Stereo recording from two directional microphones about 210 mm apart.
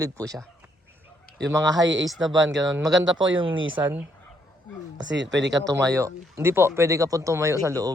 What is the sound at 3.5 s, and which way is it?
Speech, 70° right (ahead or behind).